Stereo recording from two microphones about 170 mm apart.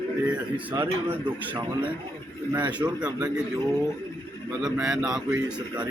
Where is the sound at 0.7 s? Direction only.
10° right (ahead or behind).